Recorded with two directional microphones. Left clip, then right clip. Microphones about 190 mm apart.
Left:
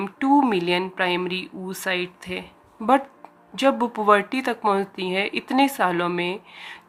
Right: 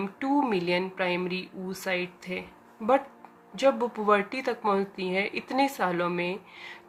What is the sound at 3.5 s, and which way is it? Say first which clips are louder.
Speech: left 4 dB; 35° left (ahead or behind).